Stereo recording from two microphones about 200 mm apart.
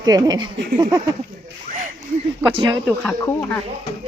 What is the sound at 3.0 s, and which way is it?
Speech, 10° left (ahead or behind).